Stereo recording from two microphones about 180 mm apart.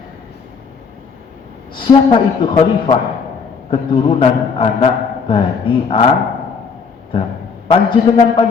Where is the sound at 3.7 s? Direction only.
30° left (ahead or behind).